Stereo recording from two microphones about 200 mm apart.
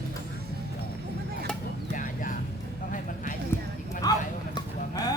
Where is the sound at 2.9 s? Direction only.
40° left (ahead or behind).